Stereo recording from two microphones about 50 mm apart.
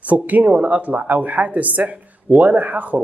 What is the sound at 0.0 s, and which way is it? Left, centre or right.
Speech, right.